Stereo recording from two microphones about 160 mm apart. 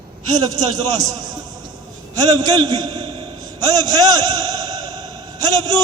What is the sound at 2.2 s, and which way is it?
A man's voice, 25° right (ahead or behind).